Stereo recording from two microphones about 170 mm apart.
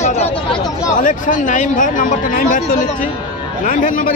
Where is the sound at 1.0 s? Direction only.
50° left (ahead or behind).